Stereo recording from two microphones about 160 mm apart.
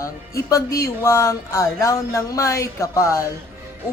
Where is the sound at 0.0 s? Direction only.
20° left (ahead or behind).